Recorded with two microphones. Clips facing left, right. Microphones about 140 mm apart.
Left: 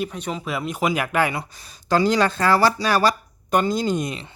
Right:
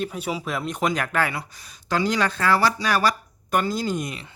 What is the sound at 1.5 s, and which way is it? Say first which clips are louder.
Speech: left 5 dB; 30° left (ahead or behind).